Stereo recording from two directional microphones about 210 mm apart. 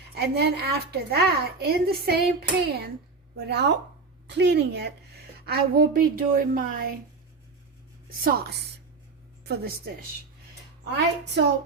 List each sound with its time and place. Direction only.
0.1 s a woman's voice: 50° right (ahead or behind)
8.2 s a woman's voice: 45° right (ahead or behind)